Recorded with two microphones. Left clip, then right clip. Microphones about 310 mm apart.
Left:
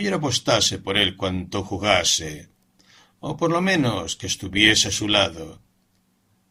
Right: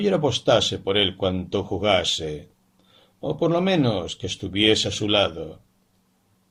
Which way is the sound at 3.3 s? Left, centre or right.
Left.